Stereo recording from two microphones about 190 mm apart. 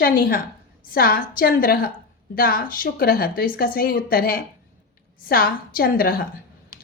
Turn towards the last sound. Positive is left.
turn(degrees=50)  # may be behind; listen again after turning